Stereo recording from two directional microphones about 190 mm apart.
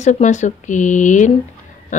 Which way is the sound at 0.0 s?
40° left (ahead or behind).